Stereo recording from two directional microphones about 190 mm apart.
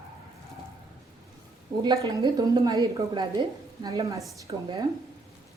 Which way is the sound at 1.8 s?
20° right (ahead or behind).